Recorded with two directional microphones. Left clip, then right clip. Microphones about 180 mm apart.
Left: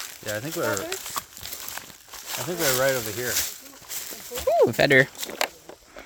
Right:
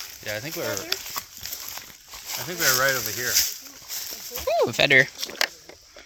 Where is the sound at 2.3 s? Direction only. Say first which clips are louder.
Left 2 dB; 15° left (ahead or behind).